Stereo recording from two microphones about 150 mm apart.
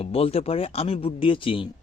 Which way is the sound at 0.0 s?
40° left (ahead or behind).